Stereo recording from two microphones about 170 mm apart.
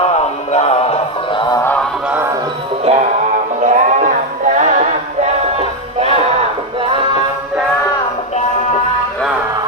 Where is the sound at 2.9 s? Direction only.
35° right (ahead or behind).